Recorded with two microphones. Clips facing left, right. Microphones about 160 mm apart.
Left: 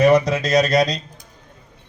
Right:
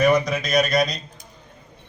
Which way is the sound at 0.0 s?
30° left (ahead or behind).